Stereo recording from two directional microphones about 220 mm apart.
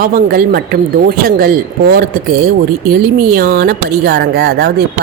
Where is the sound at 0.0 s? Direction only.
40° right (ahead or behind).